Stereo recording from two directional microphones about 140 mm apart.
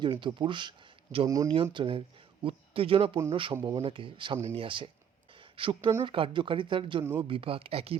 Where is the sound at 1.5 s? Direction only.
40° right (ahead or behind).